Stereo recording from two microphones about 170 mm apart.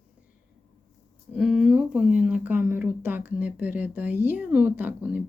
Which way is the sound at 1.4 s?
5° right (ahead or behind).